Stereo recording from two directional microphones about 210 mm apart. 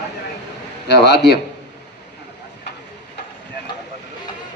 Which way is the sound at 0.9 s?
55° left (ahead or behind).